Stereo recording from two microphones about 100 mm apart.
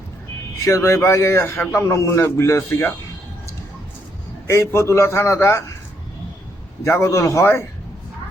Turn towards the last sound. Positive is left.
turn(degrees=25)  # may be behind; listen again after turning